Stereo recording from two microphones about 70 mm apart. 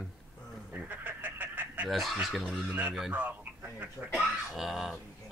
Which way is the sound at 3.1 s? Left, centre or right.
Right.